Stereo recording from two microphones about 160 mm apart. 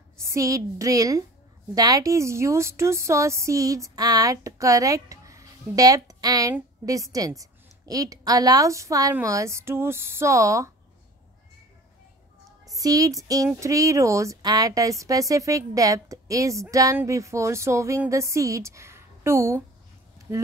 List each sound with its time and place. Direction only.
0.2 s speech: 20° right (ahead or behind)
12.7 s speech: 20° right (ahead or behind)